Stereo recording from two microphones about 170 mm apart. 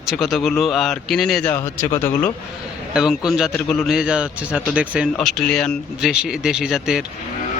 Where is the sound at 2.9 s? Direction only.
5° right (ahead or behind).